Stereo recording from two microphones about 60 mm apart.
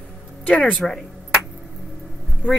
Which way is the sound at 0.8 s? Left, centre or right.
Centre.